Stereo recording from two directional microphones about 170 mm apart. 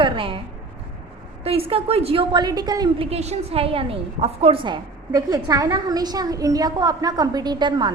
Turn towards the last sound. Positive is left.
turn(degrees=-25)  # may be behind; listen again after turning